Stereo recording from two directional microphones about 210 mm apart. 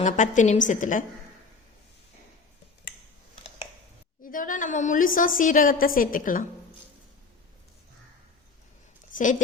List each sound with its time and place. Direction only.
0.0 s a woman's voice: 35° left (ahead or behind)
4.2 s a woman's voice: 40° left (ahead or behind)